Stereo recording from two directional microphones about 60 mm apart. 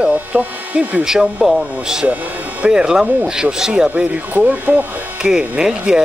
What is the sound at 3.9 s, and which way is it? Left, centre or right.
Speech, right.